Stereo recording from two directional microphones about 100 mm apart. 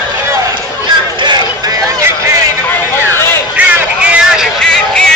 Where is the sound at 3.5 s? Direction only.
10° right (ahead or behind).